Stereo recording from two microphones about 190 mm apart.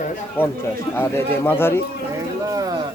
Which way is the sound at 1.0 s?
10° left (ahead or behind).